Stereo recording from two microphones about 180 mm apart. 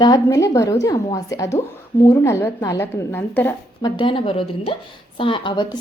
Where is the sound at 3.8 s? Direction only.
25° left (ahead or behind).